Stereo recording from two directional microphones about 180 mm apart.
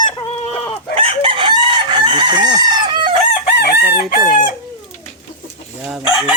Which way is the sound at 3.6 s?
50° left (ahead or behind).